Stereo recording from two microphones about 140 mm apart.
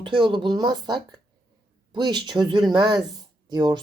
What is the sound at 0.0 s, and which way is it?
Speech, 35° right (ahead or behind).